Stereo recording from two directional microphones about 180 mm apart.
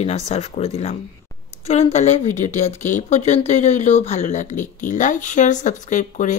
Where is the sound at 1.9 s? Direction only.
40° left (ahead or behind).